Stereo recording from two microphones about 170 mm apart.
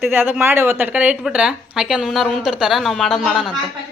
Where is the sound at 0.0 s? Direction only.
10° right (ahead or behind).